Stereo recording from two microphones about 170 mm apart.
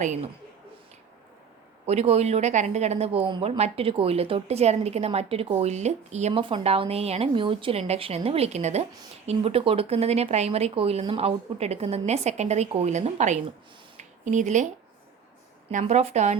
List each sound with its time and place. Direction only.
0.0 s speech: 45° right (ahead or behind)
1.9 s speech: 40° right (ahead or behind)
15.7 s speech: 40° right (ahead or behind)